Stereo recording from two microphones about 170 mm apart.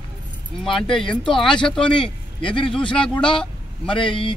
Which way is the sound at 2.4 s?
30° left (ahead or behind).